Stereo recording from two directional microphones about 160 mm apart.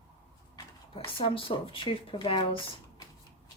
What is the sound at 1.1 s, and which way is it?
Speech, 35° left (ahead or behind).